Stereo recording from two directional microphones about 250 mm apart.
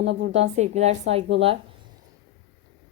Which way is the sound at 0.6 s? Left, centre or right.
Right.